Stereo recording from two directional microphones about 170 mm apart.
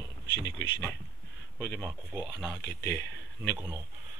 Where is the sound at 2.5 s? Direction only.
75° left (ahead or behind).